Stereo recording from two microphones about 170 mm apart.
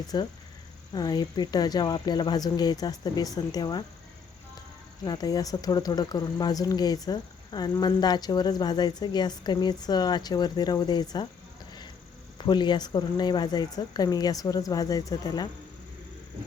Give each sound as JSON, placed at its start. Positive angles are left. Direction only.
{"t": 0.1, "sound": "speech", "side_deg": 25}
{"t": 5.0, "sound": "speech", "side_deg": 20}
{"t": 12.4, "sound": "speech", "side_deg": 25}